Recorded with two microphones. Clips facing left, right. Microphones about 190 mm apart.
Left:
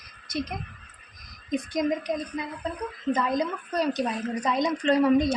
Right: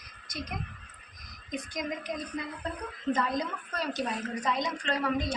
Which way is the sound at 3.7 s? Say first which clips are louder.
Left 7 dB; 15° left (ahead or behind).